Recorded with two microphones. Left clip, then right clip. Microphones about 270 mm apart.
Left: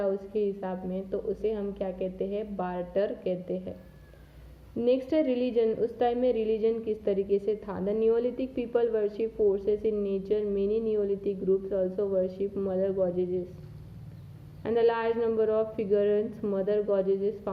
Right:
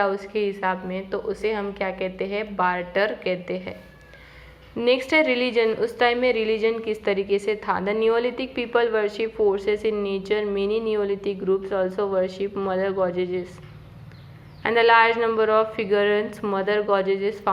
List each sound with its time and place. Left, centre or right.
0.0 s a woman's voice: centre
0.7 s a woman's voice: centre
1.1 s a woman's voice: centre
4.8 s a woman's voice: centre
14.6 s a woman's voice: centre